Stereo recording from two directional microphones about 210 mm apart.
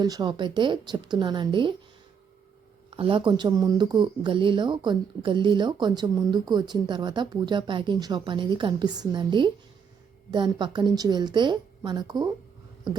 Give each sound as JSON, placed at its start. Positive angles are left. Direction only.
{"t": 0.0, "sound": "speech", "side_deg": -20}
{"t": 2.9, "sound": "speech", "side_deg": -25}